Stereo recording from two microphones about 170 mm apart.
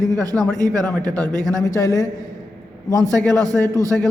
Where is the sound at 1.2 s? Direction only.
20° right (ahead or behind).